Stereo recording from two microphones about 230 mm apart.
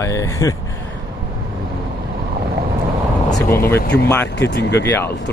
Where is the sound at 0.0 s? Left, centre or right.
Centre.